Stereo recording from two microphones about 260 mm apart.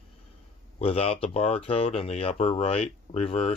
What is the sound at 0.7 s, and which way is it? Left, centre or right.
Speech, left.